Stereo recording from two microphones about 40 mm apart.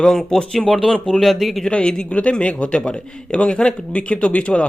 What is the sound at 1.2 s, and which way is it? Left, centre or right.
Speech, centre.